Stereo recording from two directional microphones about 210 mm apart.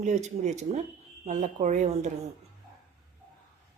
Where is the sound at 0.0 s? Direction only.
35° right (ahead or behind).